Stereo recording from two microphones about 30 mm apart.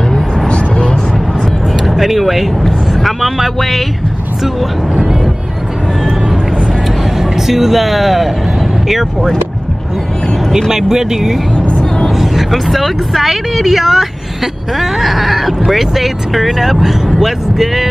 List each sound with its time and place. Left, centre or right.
2.0 s speech: centre
7.2 s speech: centre
10.7 s speech: centre
12.1 s a sound: centre
12.4 s speech: centre